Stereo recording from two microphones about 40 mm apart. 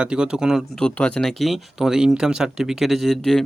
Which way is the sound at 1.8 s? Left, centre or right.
Centre.